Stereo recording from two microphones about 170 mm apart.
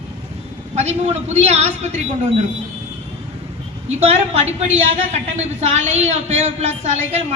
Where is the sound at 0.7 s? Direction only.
40° right (ahead or behind).